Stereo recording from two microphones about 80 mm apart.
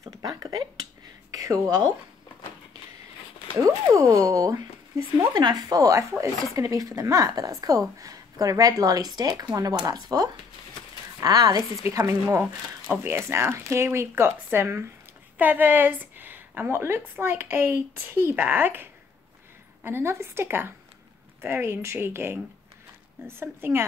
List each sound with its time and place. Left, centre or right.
0.0 s a sound: right
1.3 s speech: right
3.5 s speech: right
5.3 s speech: right
11.8 s a woman's voice: right